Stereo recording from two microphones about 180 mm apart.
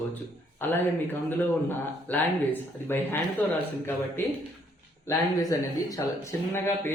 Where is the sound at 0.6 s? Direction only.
10° left (ahead or behind).